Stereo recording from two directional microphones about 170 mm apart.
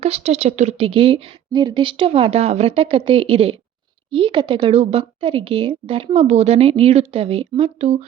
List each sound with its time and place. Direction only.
0.0 s a woman's voice: 40° right (ahead or behind)